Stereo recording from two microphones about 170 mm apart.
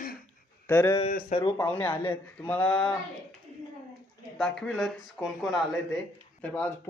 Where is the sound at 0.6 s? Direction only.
10° left (ahead or behind).